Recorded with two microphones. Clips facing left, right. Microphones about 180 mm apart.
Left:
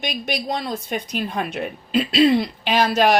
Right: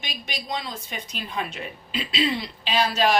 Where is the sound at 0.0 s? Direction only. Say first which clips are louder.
Left 10 dB; 65° left (ahead or behind).